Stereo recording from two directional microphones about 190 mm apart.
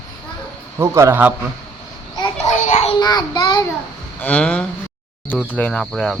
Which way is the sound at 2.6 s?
40° left (ahead or behind).